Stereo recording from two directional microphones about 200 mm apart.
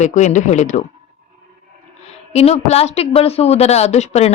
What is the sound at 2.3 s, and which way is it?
A woman's voice, 30° left (ahead or behind).